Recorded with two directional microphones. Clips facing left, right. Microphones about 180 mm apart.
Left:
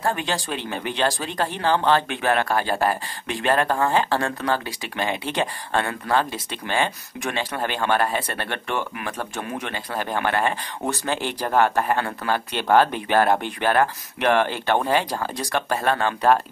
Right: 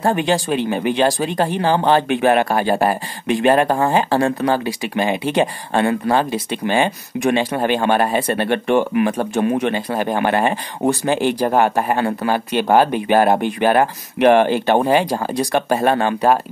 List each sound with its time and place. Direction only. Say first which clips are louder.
0.0 s speech: right 8 dB; 20° right (ahead or behind)